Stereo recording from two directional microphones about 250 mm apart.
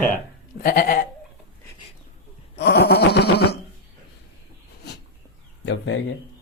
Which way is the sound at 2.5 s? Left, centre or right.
Left.